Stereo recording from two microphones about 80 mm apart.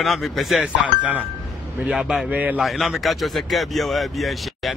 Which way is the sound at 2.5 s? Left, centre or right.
Centre.